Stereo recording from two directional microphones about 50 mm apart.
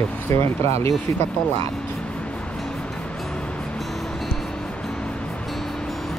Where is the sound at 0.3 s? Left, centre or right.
Left.